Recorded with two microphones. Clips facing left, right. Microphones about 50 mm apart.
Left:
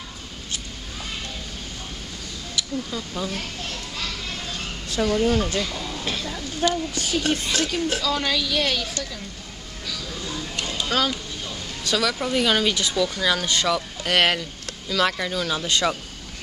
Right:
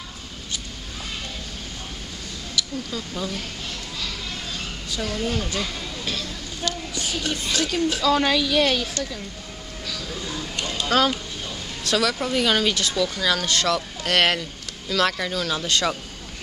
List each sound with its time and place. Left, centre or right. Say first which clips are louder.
2.9 s speech: even; centre
5.0 s speech: left 6 dB; centre
5.6 s speech: left 2 dB; centre
6.0 s speech: left 1 dB; centre
7.6 s speech: right 2 dB; centre
8.0 s a woman's voice: right 4 dB; centre
9.8 s vehicle: even; centre
10.6 s a sound: right 3 dB; centre
11.4 s speech: left 1 dB; centre